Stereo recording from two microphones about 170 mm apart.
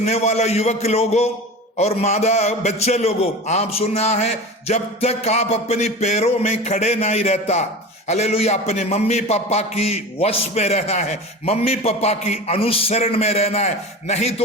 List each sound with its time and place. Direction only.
0.0 s a man's voice: 40° left (ahead or behind)